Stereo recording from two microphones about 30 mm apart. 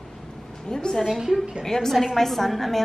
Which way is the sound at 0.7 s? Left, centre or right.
Left.